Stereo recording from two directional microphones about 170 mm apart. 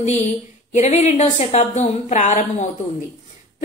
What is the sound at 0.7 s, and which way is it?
A woman's voice, 40° left (ahead or behind).